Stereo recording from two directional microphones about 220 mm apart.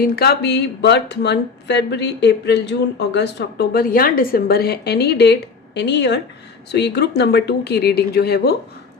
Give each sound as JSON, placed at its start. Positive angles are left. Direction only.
{"t": 0.0, "sound": "speech", "side_deg": 45}